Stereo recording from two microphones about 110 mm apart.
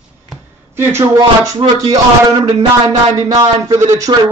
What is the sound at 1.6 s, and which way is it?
Speech, 50° right (ahead or behind).